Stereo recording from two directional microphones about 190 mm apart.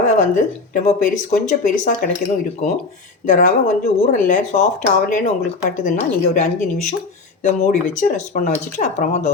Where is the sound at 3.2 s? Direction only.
45° left (ahead or behind).